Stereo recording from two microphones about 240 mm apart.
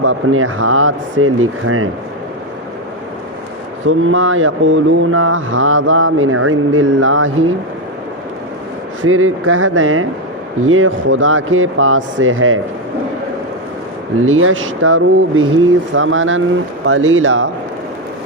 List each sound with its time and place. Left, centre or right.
0.0 s speech: right
3.8 s speech: right
9.0 s speech: right
14.3 s speech: right